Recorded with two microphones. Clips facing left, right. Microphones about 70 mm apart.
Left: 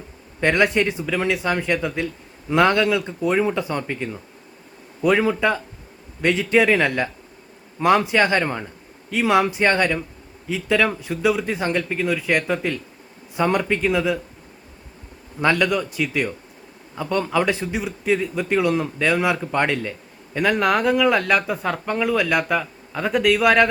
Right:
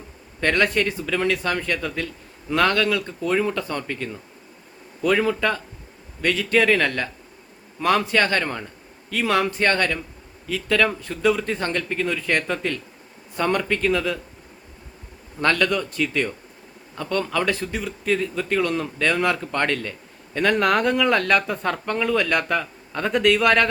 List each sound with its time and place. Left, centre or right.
0.3 s a man's voice: centre
15.4 s a man's voice: centre